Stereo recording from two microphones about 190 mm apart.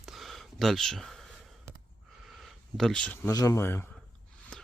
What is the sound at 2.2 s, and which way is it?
Speech, centre (ahead or behind).